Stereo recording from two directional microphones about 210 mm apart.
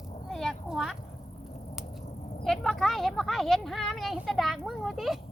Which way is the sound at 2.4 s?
Centre (ahead or behind).